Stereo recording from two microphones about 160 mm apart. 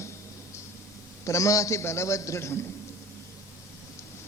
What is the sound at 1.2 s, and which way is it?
A man's voice, 20° left (ahead or behind).